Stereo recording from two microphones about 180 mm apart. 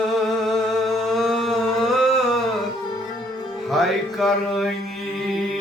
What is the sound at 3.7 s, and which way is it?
Music, centre (ahead or behind).